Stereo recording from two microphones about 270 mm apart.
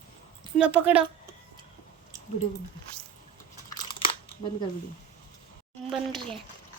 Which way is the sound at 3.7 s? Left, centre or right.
Centre.